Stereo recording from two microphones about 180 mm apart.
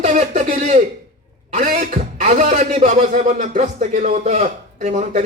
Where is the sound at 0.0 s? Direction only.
40° right (ahead or behind).